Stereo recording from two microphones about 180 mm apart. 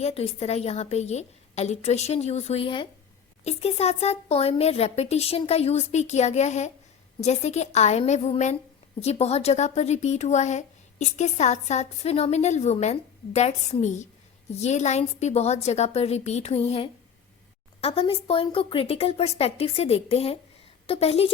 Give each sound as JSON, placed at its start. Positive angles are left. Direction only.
{"t": 0.0, "sound": "a woman's voice", "side_deg": 35}